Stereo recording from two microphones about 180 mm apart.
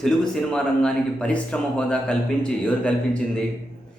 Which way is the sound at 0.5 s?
5° left (ahead or behind).